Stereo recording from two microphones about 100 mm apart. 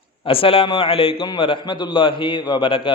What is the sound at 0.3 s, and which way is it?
A man's voice, 65° left (ahead or behind).